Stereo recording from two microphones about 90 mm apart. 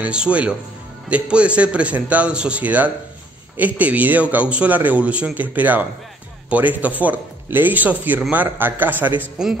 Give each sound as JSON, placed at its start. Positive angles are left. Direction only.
{"t": 0.0, "sound": "a man's voice", "side_deg": -10}